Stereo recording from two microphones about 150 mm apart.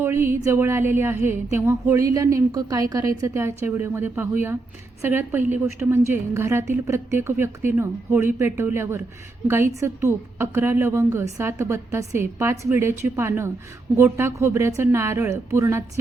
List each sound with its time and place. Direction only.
0.0 s a woman's voice: 15° right (ahead or behind)